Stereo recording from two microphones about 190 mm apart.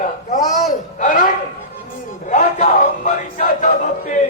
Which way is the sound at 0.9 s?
45° left (ahead or behind).